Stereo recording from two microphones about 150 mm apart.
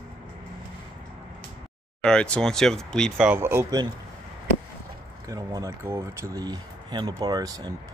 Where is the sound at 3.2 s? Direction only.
10° right (ahead or behind).